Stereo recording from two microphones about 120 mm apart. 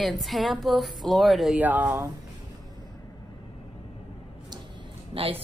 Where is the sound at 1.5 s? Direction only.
15° right (ahead or behind).